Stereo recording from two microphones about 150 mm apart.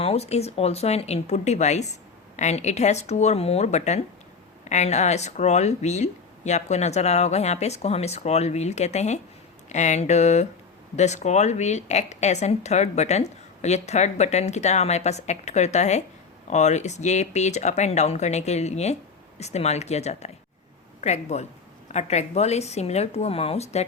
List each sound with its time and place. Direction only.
0.0 s speech: 45° left (ahead or behind)